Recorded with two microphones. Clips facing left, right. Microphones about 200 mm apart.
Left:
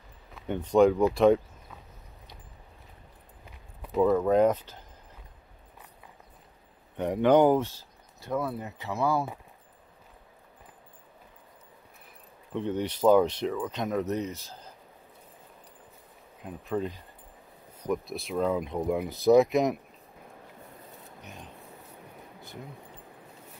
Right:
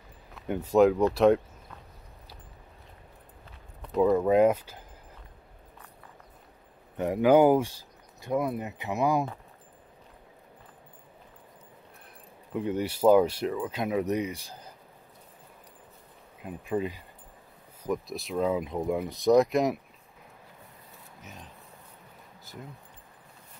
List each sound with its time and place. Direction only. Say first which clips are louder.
0.3 s speech: even; 5° right (ahead or behind)
3.8 s speech: even; centre (ahead or behind)
7.0 s speech: right 1 dB; 5° right (ahead or behind)
12.5 s speech: right 1 dB; 10° right (ahead or behind)
16.4 s speech: right 1 dB; 5° right (ahead or behind)
21.2 s speech: even; centre (ahead or behind)